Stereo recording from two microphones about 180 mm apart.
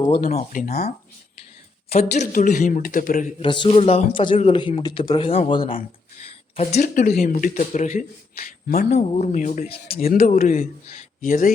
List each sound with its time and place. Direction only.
0.1 s a man's voice: 35° left (ahead or behind); by 0.9 s 55° left (ahead or behind)
1.9 s a man's voice: 40° left (ahead or behind)
3.4 s speech: 25° left (ahead or behind)
10.6 s speech: 50° left (ahead or behind)